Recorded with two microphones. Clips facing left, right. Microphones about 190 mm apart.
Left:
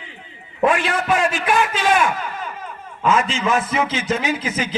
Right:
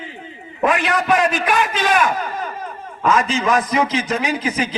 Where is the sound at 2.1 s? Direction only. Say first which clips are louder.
Right 3 dB; 40° right (ahead or behind).